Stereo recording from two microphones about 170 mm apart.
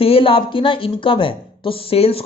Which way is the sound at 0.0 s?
35° left (ahead or behind).